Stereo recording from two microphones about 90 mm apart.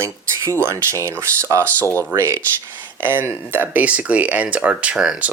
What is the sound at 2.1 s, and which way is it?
Speech, 30° right (ahead or behind).